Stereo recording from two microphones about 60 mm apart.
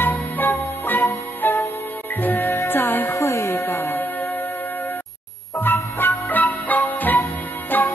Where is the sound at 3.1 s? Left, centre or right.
Left.